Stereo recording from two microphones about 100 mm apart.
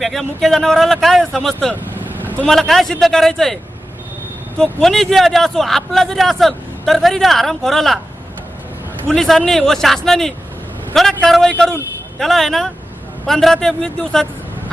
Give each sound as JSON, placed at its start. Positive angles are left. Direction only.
{"t": 0.0, "sound": "speech", "side_deg": 0}
{"t": 9.0, "sound": "speech", "side_deg": 5}